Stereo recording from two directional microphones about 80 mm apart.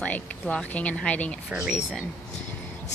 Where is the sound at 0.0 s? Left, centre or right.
Centre.